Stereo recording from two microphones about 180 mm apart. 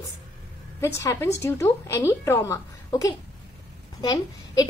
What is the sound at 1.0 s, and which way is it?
A woman's voice, 15° left (ahead or behind).